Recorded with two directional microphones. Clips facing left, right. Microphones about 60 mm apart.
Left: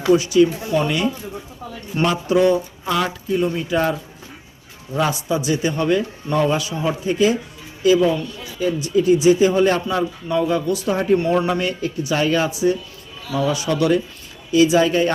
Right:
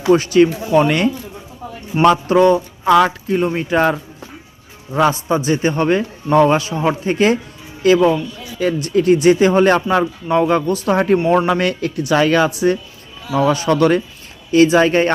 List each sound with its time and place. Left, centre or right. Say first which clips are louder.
0.1 s speech: right 3 dB; right
2.2 s speech: right 4 dB; right
4.9 s speech: right 5 dB; right
11.4 s speech: right 4 dB; right
13.3 s speech: right 5 dB; right